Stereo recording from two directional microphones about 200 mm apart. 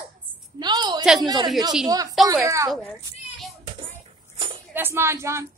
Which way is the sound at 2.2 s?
15° right (ahead or behind).